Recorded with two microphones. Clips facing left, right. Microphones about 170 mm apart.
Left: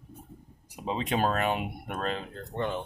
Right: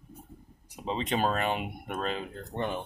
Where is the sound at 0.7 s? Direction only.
5° left (ahead or behind).